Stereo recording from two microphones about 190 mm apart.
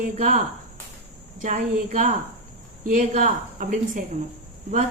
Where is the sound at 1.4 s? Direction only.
40° right (ahead or behind).